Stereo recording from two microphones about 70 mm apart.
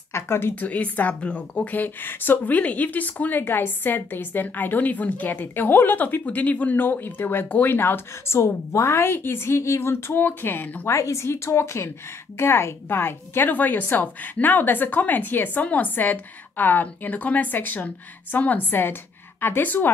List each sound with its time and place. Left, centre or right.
0.1 s speech: left
0.6 s a woman's voice: left
10.9 s a woman's voice: left